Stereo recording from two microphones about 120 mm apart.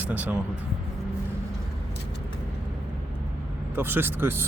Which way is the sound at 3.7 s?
20° right (ahead or behind).